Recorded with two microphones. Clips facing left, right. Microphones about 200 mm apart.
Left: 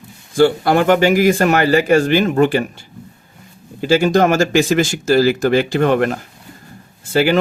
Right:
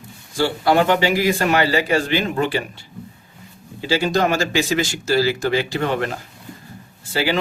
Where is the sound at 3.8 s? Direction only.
50° left (ahead or behind).